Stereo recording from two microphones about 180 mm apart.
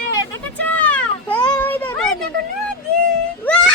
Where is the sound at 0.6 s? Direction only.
10° left (ahead or behind).